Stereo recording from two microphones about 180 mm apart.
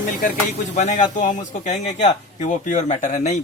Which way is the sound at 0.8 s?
45° left (ahead or behind).